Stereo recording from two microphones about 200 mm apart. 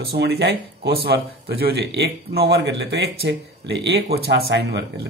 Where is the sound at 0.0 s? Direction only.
55° right (ahead or behind).